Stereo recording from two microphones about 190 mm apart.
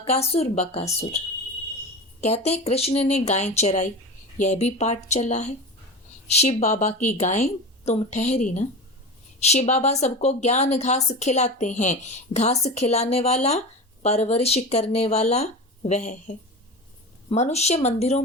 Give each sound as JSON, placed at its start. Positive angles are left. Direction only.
{"t": 0.0, "sound": "a woman's voice", "side_deg": 30}
{"t": 2.2, "sound": "a woman's voice", "side_deg": 35}